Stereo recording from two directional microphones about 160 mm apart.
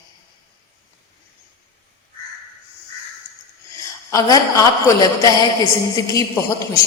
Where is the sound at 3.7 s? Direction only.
20° left (ahead or behind).